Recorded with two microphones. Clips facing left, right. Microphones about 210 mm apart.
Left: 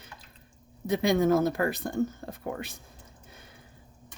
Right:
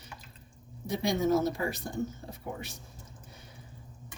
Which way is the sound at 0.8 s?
60° left (ahead or behind).